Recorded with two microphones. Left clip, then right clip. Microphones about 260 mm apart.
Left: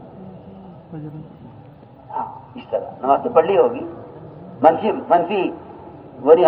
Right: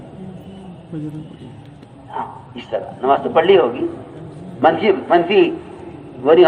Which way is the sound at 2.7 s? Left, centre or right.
Right.